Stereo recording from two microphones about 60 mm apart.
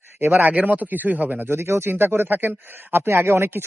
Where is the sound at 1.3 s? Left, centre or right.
Right.